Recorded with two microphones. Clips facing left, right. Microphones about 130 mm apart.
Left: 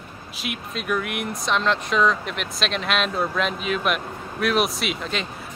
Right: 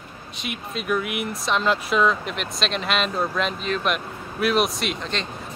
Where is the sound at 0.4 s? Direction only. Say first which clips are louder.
Even; centre (ahead or behind).